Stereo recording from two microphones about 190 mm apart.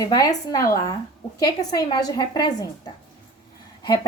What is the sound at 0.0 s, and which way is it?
A woman's voice, 20° left (ahead or behind).